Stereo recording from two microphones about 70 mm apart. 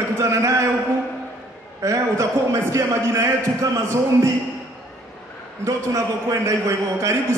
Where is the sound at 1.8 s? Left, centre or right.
Right.